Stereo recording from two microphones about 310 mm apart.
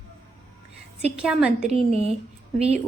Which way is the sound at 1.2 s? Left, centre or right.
Centre.